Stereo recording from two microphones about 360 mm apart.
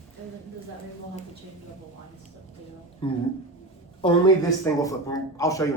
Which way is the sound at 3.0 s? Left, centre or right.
Centre.